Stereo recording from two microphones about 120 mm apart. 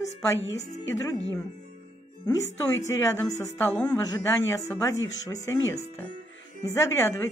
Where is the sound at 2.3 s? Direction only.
25° left (ahead or behind).